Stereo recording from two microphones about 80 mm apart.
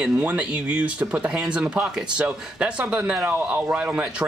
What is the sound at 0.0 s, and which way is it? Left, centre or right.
Speech, centre.